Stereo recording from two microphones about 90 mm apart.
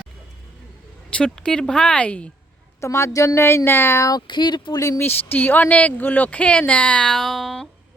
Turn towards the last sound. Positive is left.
turn(degrees=0)  # may be behind; listen again after turning